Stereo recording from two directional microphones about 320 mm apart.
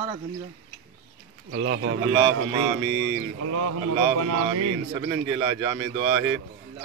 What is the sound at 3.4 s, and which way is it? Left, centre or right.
Speech, right.